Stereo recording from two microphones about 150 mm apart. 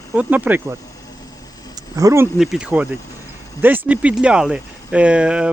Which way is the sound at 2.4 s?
5° right (ahead or behind).